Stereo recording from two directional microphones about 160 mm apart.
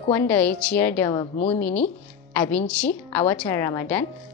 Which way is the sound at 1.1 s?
35° left (ahead or behind).